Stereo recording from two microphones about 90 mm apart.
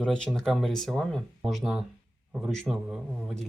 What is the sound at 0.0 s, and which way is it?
Speech, 10° left (ahead or behind).